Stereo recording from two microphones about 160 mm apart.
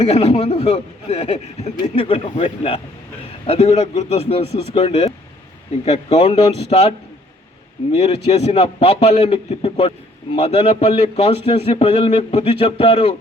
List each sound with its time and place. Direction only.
0.0 s a man's voice: 40° left (ahead or behind)
7.9 s a man's voice: 40° left (ahead or behind)